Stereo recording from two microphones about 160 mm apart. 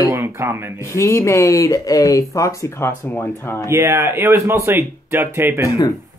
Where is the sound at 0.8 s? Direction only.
20° left (ahead or behind).